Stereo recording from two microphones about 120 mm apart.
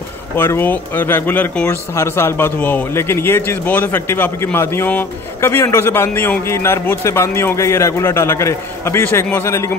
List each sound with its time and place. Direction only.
0.4 s speech: 15° left (ahead or behind)